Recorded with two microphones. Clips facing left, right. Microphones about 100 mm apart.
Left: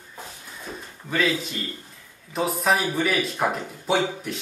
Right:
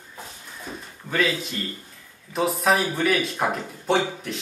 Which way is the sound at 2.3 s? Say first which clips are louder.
Right 1 dB; centre (ahead or behind).